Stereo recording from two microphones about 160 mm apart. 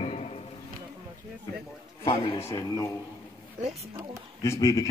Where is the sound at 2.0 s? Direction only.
30° left (ahead or behind).